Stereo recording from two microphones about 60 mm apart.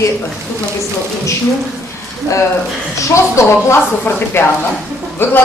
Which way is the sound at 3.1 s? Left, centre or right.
Left.